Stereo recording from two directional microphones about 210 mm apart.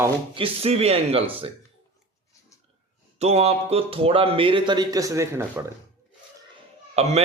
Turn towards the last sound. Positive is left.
turn(degrees=-30)  # may be behind; listen again after turning